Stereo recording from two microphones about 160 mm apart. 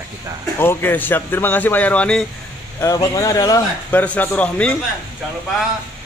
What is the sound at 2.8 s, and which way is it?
Speech, 20° left (ahead or behind).